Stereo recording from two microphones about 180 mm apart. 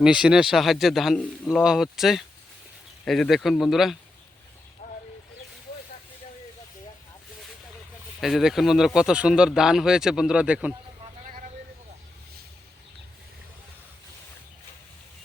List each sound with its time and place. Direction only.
0.0 s speech: 5° right (ahead or behind)
4.8 s a sound: 40° left (ahead or behind)
8.2 s speech: centre (ahead or behind)